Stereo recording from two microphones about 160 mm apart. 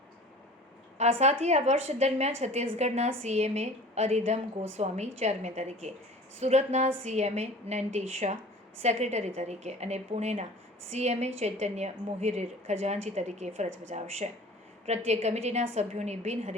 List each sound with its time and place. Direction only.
0.9 s a woman's voice: 45° right (ahead or behind)